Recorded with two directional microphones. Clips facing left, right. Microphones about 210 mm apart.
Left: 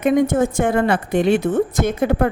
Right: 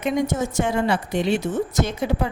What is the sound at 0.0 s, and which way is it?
Speech, 55° left (ahead or behind).